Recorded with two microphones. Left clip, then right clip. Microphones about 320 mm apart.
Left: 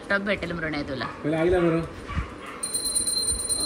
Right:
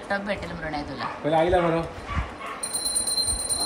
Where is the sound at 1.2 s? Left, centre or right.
Right.